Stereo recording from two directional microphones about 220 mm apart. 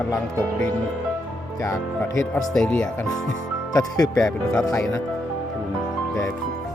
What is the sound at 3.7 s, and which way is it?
Speech, 15° left (ahead or behind).